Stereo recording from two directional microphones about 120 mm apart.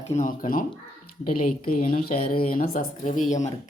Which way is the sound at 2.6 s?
90° left.